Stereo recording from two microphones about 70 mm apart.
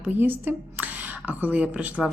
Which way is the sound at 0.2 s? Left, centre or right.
Right.